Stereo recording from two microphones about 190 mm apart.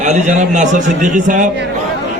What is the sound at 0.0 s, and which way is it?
A man's voice, 40° right (ahead or behind).